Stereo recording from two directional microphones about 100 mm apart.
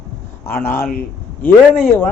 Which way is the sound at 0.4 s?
25° left (ahead or behind).